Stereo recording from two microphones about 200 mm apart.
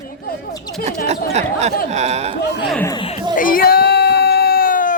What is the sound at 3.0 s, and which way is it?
Speech, 30° left (ahead or behind).